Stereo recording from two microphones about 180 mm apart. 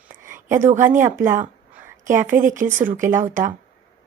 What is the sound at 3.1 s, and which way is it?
Speech, 45° right (ahead or behind).